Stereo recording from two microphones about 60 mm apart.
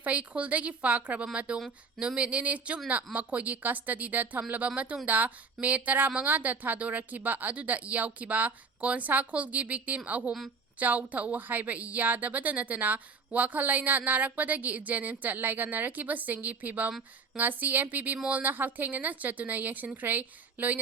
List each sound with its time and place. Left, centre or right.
0.0 s a woman's voice: right